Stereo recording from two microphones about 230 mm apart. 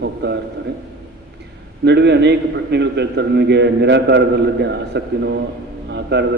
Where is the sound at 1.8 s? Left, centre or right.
Right.